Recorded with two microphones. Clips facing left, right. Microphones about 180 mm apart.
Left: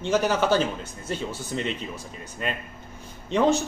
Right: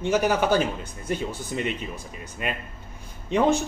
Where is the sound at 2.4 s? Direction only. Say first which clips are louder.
Even; 10° right (ahead or behind).